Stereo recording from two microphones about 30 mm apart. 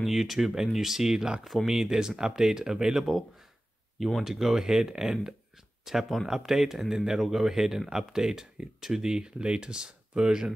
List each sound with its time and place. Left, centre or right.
0.0 s speech: centre
1.5 s speech: centre
1.9 s speech: right
4.2 s speech: centre; by 10.5 s right